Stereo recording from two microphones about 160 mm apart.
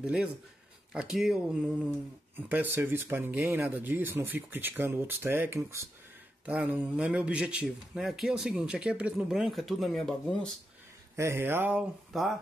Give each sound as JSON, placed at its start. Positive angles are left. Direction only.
{"t": 0.0, "sound": "speech", "side_deg": -5}
{"t": 11.1, "sound": "speech", "side_deg": -15}